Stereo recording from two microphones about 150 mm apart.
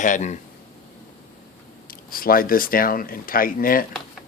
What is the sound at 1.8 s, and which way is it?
Speech, 75° left (ahead or behind).